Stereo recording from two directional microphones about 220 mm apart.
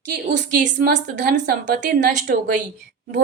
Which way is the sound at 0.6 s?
35° right (ahead or behind).